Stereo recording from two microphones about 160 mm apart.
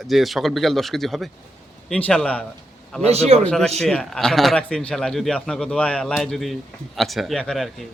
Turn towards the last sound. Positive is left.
turn(degrees=0)  # may be behind; listen again after turning